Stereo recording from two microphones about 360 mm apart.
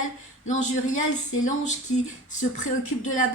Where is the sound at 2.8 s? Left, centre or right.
Left.